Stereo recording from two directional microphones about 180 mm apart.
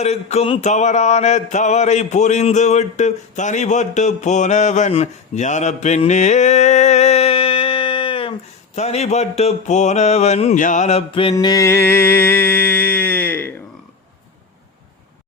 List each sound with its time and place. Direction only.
0.0 s mantra: 35° left (ahead or behind); by 13.5 s 10° left (ahead or behind)